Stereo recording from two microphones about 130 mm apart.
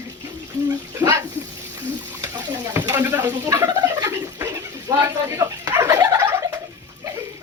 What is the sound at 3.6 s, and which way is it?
Fowl, 25° right (ahead or behind).